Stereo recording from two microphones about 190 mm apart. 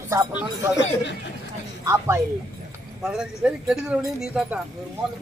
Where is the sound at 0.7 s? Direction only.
65° left (ahead or behind).